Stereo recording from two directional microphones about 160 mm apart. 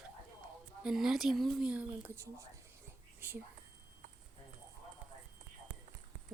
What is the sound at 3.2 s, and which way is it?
Whispering, 15° right (ahead or behind).